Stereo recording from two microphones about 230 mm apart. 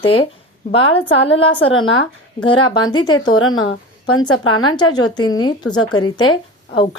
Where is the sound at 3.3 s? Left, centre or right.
Left.